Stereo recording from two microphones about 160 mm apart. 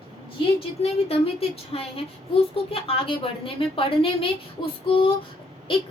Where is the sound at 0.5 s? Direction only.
40° left (ahead or behind).